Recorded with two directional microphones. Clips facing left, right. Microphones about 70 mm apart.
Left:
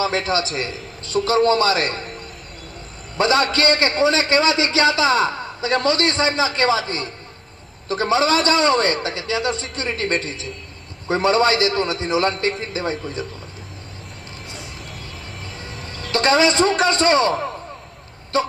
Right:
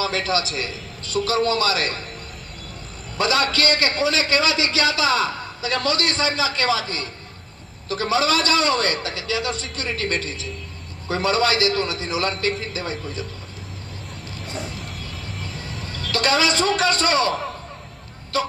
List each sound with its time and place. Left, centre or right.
0.0 s a man's voice: left
3.2 s a man's voice: left
15.9 s a man's voice: left